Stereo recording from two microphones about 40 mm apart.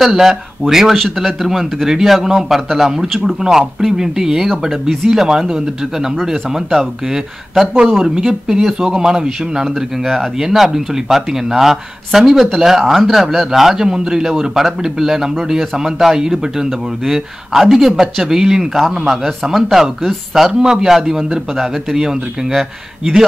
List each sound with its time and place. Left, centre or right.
0.0 s speech: centre
0.9 s speech: centre